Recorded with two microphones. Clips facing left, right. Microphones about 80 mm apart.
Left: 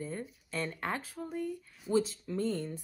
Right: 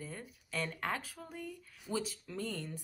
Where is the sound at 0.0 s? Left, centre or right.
Left.